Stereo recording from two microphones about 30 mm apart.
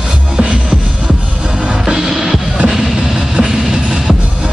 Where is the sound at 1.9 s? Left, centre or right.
Centre.